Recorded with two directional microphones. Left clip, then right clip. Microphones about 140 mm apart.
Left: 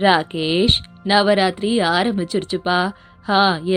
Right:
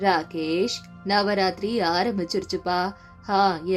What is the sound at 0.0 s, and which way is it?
Speech, 35° left (ahead or behind).